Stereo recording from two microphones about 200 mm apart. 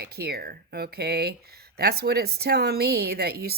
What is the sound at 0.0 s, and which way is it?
A woman's voice, 50° right (ahead or behind).